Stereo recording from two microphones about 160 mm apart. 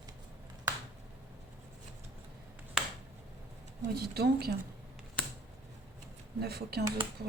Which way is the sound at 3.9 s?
80° right.